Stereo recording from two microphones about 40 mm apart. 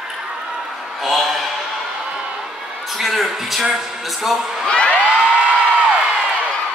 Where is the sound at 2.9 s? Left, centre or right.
Centre.